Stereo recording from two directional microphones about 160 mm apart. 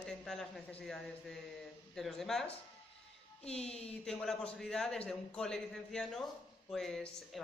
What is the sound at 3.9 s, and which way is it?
A man's voice, 5° left (ahead or behind).